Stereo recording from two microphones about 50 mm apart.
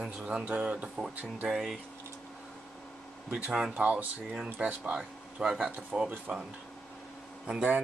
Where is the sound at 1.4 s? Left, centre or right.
Centre.